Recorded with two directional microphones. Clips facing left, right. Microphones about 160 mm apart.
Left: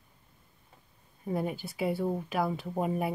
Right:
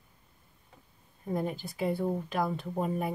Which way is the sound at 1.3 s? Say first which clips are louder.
Even; 10° left (ahead or behind).